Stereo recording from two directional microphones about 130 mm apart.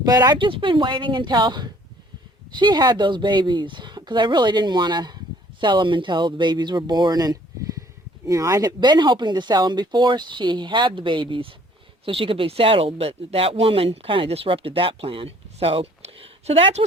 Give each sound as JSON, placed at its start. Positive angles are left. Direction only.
{"t": 0.0, "sound": "speech", "side_deg": -30}